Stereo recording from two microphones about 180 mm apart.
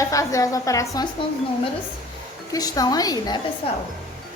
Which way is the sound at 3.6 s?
30° left (ahead or behind).